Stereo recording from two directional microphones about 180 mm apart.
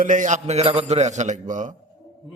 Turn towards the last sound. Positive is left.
turn(degrees=-45)  # may be behind; listen again after turning